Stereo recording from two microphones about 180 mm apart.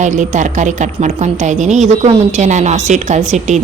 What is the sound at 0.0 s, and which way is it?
Speech, 45° right (ahead or behind).